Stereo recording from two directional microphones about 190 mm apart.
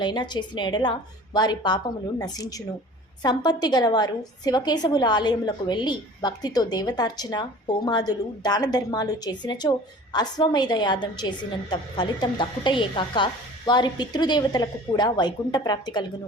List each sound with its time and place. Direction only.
0.0 s a woman's voice: 25° left (ahead or behind)